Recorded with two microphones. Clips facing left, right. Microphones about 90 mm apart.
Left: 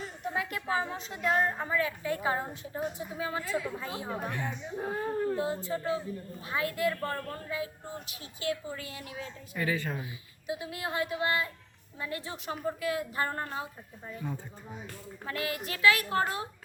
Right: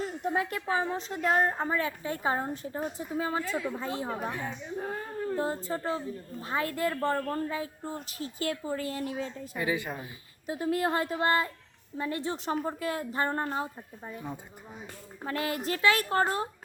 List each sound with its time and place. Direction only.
0.7 s a woman's voice: 25° right (ahead or behind)
3.4 s speech: centre (ahead or behind)
5.4 s a woman's voice: 40° right (ahead or behind)
9.6 s a woman's voice: 15° right (ahead or behind)
10.0 s a woman's voice: 40° right (ahead or behind); by 14.3 s 20° right (ahead or behind)
15.2 s a woman's voice: 35° right (ahead or behind)